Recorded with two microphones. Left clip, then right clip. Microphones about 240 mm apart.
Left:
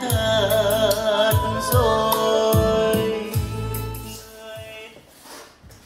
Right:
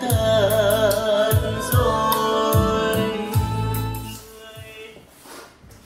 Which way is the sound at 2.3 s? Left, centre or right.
Right.